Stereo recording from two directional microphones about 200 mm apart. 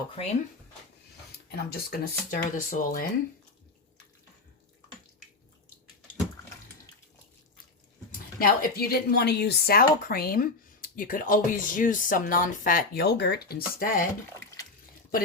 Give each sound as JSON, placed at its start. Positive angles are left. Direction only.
{"t": 1.5, "sound": "speech", "side_deg": 45}
{"t": 8.4, "sound": "speech", "side_deg": 45}